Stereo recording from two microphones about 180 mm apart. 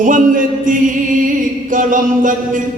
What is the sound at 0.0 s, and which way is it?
Music, 45° right (ahead or behind).